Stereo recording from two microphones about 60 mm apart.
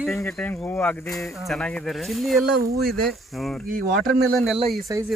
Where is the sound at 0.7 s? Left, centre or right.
Left.